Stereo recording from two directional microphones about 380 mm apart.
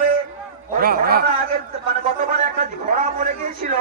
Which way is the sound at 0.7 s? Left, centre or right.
Right.